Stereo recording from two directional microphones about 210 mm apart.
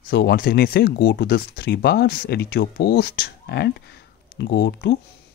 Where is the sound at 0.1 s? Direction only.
50° left (ahead or behind).